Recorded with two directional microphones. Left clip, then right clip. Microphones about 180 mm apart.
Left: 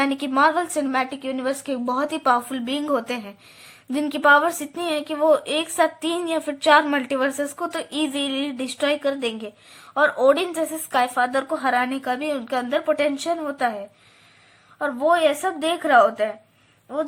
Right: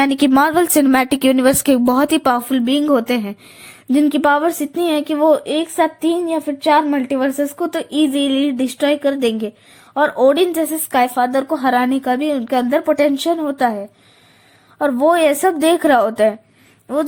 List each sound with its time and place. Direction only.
0.0 s a woman's voice: 40° right (ahead or behind)
14.8 s a woman's voice: 40° right (ahead or behind)